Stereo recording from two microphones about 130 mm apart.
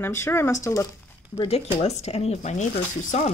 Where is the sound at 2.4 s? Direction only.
70° left (ahead or behind).